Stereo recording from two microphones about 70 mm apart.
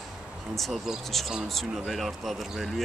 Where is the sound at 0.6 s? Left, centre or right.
Centre.